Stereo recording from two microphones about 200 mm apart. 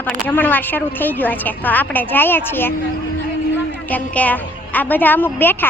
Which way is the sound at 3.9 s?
10° left (ahead or behind).